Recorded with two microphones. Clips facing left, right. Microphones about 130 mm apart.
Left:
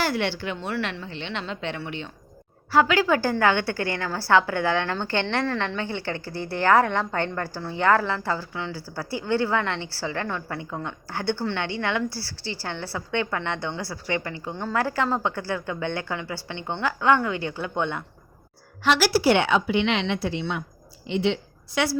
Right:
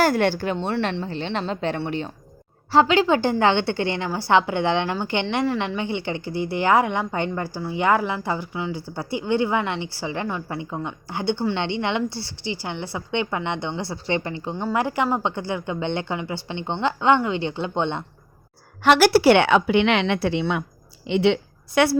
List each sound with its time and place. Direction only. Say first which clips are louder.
0.0 s a woman's voice: right 6 dB; 45° right (ahead or behind)
2.7 s a woman's voice: right 3 dB; 25° right (ahead or behind)
18.8 s a woman's voice: right 5 dB; 55° right (ahead or behind)
21.8 s a woman's voice: right 6 dB; 55° right (ahead or behind)